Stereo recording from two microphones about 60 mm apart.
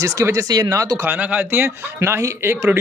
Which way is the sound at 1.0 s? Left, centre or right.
Right.